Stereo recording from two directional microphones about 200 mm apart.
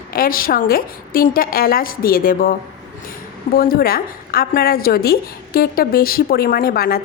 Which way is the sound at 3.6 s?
50° left (ahead or behind).